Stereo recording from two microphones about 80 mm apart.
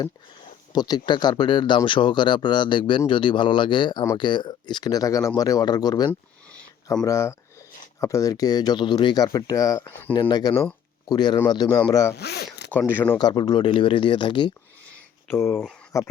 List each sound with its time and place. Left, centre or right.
0.7 s speech: left
7.0 s speech: left
9.1 s speech: left
10.2 s speech: left
12.9 s speech: left
13.1 s speech: left
15.3 s speech: left